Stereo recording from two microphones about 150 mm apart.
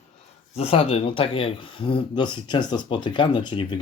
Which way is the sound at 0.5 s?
40° left (ahead or behind).